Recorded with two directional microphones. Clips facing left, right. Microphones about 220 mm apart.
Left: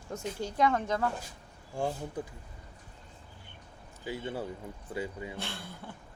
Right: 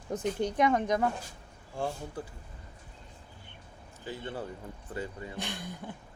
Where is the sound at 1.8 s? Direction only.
15° left (ahead or behind).